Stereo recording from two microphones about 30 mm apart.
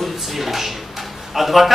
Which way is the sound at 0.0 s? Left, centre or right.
Centre.